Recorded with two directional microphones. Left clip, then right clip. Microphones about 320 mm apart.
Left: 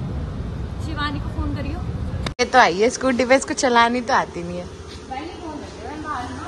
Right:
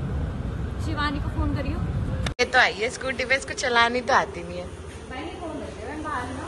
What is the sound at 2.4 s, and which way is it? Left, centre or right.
Speech, centre.